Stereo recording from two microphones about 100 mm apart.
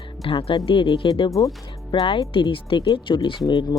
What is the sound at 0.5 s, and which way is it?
Speech, 60° left (ahead or behind).